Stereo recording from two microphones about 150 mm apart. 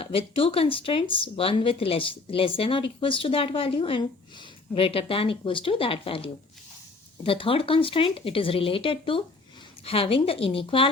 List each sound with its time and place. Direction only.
0.0 s speech: 40° left (ahead or behind)